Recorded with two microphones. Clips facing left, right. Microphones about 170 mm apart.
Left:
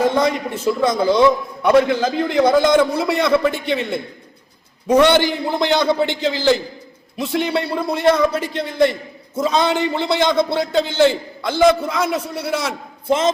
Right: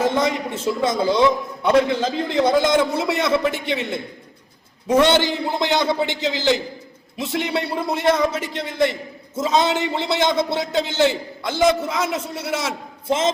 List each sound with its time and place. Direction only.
0.0 s a man's voice: 25° right (ahead or behind)